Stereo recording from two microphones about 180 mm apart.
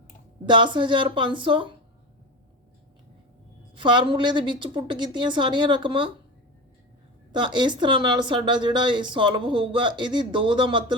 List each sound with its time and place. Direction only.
0.4 s speech: 25° right (ahead or behind)
3.8 s speech: 25° right (ahead or behind)
7.3 s speech: 25° right (ahead or behind)